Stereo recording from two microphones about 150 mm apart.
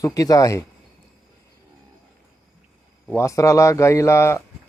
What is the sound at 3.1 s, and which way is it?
Speech, 20° left (ahead or behind).